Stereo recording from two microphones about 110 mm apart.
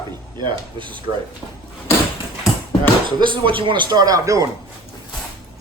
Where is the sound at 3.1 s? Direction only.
45° right (ahead or behind).